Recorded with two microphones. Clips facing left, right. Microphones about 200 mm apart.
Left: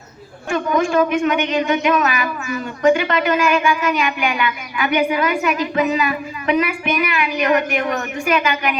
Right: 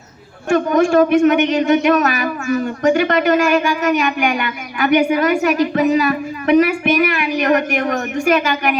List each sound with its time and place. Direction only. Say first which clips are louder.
0.5 s a woman's voice: right 4 dB; 45° right (ahead or behind)